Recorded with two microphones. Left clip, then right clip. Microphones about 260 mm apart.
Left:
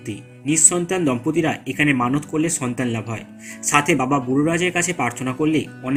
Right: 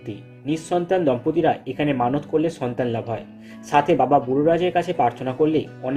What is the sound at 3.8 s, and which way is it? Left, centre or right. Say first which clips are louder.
Speech: right 2 dB; left.